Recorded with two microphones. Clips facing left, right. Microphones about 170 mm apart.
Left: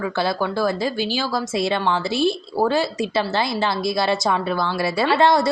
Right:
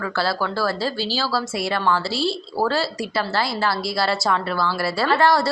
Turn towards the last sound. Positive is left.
turn(degrees=20)  # may be behind; listen again after turning